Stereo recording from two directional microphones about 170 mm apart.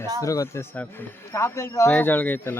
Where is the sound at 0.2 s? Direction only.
20° left (ahead or behind).